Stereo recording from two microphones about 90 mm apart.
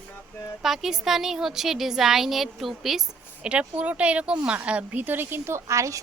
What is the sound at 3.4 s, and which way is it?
A woman's voice, 15° right (ahead or behind).